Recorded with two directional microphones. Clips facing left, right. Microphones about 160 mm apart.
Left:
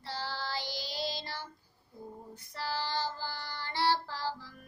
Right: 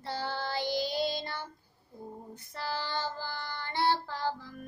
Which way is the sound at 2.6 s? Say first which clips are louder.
Even; 55° right (ahead or behind).